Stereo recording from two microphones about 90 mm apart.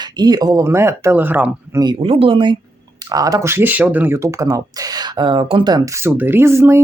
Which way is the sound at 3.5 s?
25° right (ahead or behind).